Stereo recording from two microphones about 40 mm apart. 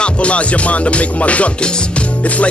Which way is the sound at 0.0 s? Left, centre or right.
Left.